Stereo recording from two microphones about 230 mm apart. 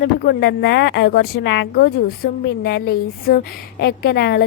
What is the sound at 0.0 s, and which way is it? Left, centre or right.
A woman's voice, left.